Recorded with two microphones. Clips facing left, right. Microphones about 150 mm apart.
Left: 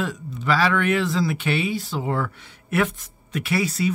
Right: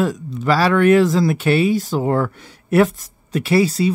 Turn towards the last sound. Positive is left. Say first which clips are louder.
# right 7 dB
turn(degrees=-30)  # may be behind; listen again after turning